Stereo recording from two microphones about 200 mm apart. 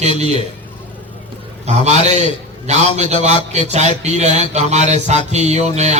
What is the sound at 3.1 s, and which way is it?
Music, 35° right (ahead or behind).